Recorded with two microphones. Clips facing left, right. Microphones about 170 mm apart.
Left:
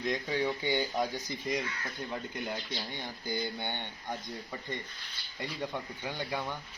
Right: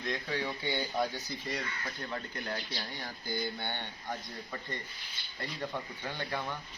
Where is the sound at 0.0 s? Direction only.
15° left (ahead or behind).